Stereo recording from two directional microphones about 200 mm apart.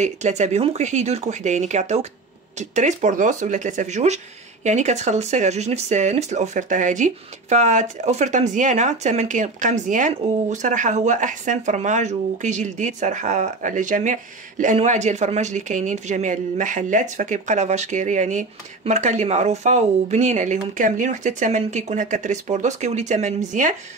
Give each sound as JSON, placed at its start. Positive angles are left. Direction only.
{"t": 0.0, "sound": "speech", "side_deg": -35}